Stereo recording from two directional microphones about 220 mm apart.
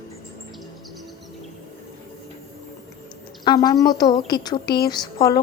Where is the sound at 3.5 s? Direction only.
15° left (ahead or behind).